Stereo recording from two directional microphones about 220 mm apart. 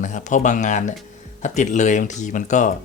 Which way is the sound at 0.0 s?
35° left (ahead or behind).